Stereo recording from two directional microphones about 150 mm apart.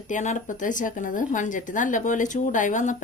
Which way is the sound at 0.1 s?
55° left (ahead or behind).